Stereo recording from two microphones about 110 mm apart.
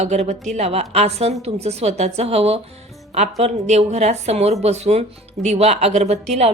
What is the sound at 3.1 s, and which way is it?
A woman's voice, 90° right.